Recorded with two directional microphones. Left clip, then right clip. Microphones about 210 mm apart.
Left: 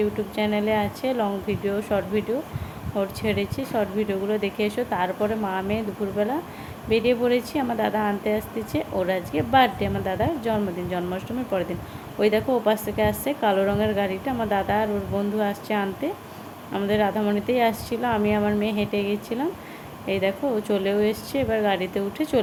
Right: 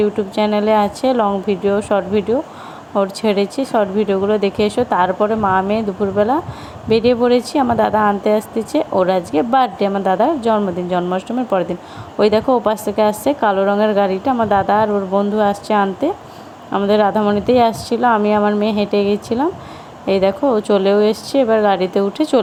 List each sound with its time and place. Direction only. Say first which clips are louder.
0.0 s a woman's voice: right 8 dB; 30° right (ahead or behind)